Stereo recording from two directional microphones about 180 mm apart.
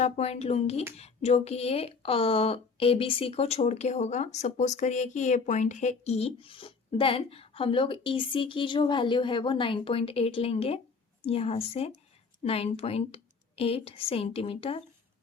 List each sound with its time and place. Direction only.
0.0 s speech: 35° left (ahead or behind)